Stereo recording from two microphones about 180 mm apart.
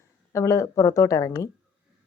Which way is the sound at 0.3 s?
15° left (ahead or behind).